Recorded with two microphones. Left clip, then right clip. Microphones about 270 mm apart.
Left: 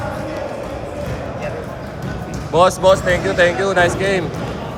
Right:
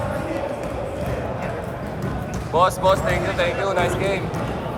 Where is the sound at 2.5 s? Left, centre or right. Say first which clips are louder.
Left 5 dB; left.